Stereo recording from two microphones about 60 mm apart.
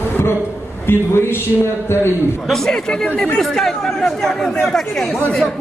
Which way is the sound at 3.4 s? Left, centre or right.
Centre.